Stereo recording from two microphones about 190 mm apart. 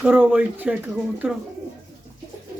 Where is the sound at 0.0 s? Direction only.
10° right (ahead or behind).